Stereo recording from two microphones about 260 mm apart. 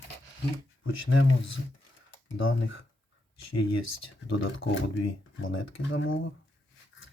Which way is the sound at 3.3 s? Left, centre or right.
Left.